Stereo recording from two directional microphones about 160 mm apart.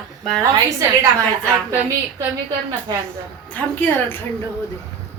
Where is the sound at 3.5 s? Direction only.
10° left (ahead or behind).